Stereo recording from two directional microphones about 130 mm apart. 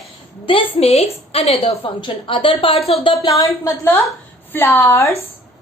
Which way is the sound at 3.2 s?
25° left (ahead or behind).